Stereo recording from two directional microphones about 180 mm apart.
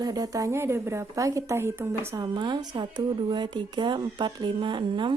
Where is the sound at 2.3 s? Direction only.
25° right (ahead or behind).